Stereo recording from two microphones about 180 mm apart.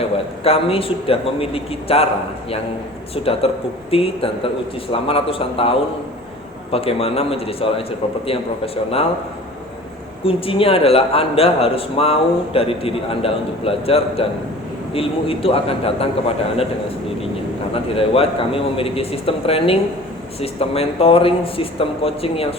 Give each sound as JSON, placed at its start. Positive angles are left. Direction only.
{"t": 0.4, "sound": "a man's voice", "side_deg": 30}
{"t": 3.2, "sound": "a man's voice", "side_deg": 30}
{"t": 10.2, "sound": "a man's voice", "side_deg": 30}
{"t": 17.8, "sound": "a man's voice", "side_deg": 30}